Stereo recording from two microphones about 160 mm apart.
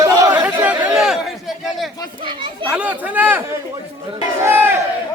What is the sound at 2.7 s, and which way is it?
Speech, 10° right (ahead or behind).